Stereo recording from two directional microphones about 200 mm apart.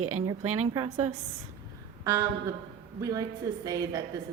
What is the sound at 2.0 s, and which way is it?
A woman's voice, 15° right (ahead or behind).